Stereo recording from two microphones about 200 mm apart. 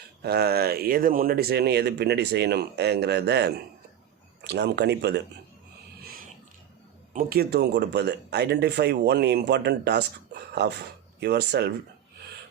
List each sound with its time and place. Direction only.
0.2 s speech: 55° right (ahead or behind)
7.1 s speech: 45° right (ahead or behind)